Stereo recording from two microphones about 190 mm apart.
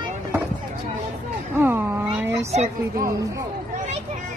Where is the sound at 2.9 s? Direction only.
15° right (ahead or behind).